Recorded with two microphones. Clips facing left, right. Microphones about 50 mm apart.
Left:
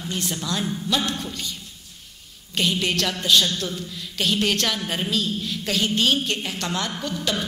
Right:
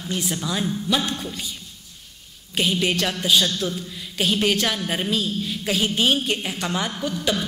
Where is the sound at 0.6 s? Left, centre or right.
Centre.